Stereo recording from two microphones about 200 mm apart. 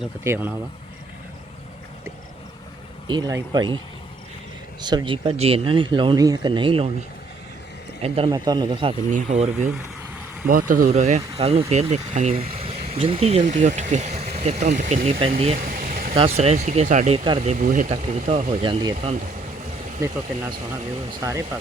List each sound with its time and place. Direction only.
0.0 s speech: 10° right (ahead or behind)
3.1 s speech: 20° right (ahead or behind)
4.8 s speech: 20° right (ahead or behind)
8.0 s speech: 30° right (ahead or behind)
8.3 s speech: 20° right (ahead or behind)
9.0 s speech: 40° right (ahead or behind)
15.7 s vehicle: 45° right (ahead or behind)
16.1 s speech: 30° right (ahead or behind)
17.9 s speech: 30° right (ahead or behind)
21.1 s speech: 15° right (ahead or behind)